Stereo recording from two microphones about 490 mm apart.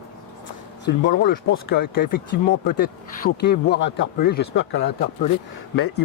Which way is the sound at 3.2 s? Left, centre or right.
Centre.